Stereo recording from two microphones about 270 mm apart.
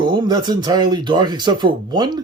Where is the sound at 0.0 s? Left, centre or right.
Centre.